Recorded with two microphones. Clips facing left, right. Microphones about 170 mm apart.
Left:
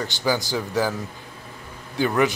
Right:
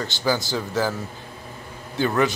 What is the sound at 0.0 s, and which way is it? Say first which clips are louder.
Speech: even; 15° left (ahead or behind).